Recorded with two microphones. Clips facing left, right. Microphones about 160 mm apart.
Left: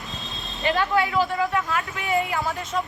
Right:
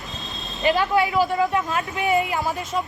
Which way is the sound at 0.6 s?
20° right (ahead or behind).